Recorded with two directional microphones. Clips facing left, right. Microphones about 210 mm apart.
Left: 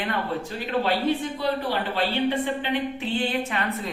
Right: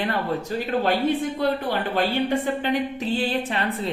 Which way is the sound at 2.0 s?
45° right (ahead or behind).